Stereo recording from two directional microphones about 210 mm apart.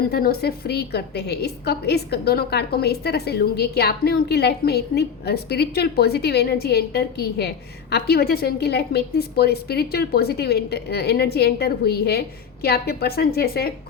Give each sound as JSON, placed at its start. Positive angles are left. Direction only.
{"t": 0.1, "sound": "a woman's voice", "side_deg": 45}